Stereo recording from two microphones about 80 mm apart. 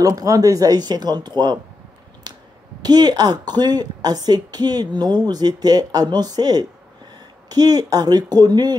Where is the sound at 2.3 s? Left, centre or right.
Right.